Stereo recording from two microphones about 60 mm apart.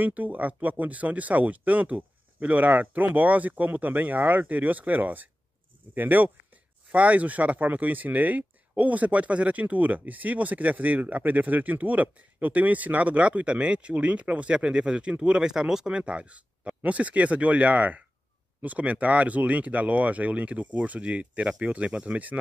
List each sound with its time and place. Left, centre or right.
0.0 s speech: right